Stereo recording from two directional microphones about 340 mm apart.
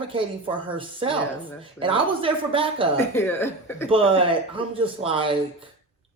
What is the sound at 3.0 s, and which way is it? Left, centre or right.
Speech, centre.